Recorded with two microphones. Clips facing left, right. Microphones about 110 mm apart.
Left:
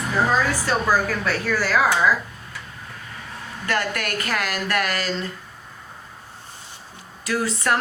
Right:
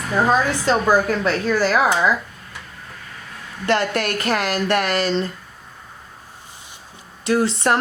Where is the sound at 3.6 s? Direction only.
25° right (ahead or behind).